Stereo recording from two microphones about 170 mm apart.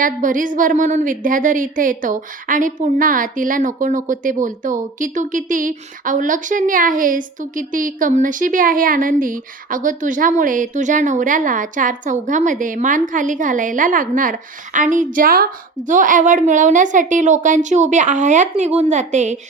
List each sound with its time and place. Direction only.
0.0 s a woman's voice: 50° right (ahead or behind)